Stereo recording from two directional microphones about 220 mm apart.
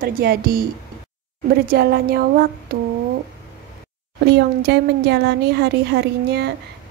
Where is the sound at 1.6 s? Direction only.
45° right (ahead or behind).